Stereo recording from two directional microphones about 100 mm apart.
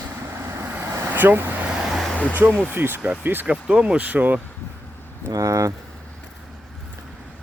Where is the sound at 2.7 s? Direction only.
20° right (ahead or behind).